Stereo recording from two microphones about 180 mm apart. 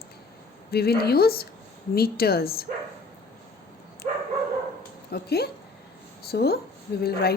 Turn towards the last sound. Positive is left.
turn(degrees=60)  # may be behind; listen again after turning